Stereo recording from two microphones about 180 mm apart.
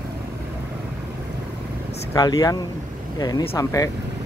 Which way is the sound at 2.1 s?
20° left (ahead or behind).